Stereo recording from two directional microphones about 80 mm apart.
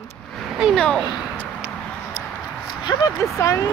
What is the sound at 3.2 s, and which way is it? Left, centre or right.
Speech, left.